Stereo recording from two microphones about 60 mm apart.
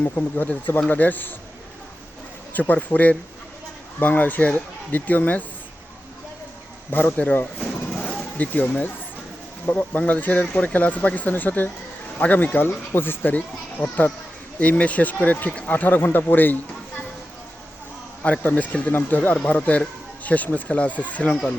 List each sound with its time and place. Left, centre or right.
0.0 s a man's voice: left
2.6 s a man's voice: left
6.9 s a man's voice: left
12.5 s a child's voice: left
18.2 s a man's voice: left